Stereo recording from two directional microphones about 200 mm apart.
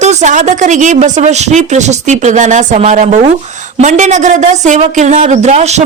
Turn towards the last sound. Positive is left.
turn(degrees=-35)  # may be behind; listen again after turning